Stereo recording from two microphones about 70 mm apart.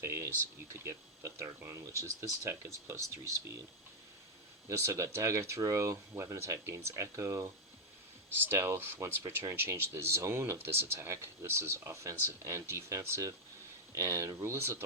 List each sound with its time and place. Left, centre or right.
0.0 s speech: right
4.9 s speech: right